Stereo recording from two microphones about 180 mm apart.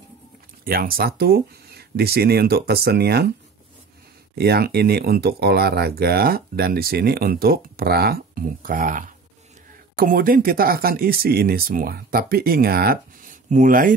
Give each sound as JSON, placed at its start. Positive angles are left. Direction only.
{"t": 0.7, "sound": "speech", "side_deg": -55}
{"t": 4.4, "sound": "speech", "side_deg": -60}